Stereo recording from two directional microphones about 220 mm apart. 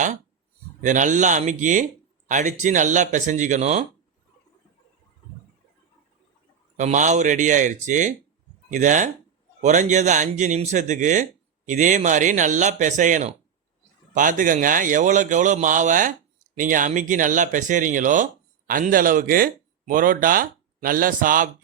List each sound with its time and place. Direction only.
0.8 s a man's voice: 35° right (ahead or behind)
6.7 s a man's voice: 35° right (ahead or behind)